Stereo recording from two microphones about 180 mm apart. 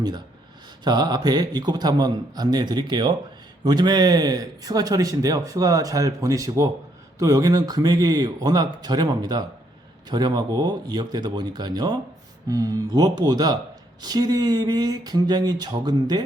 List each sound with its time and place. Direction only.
0.9 s speech: 20° right (ahead or behind)